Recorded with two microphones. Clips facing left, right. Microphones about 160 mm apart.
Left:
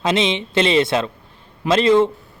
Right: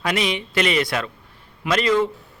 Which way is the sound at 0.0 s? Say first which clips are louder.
Left 4 dB; 25° left (ahead or behind).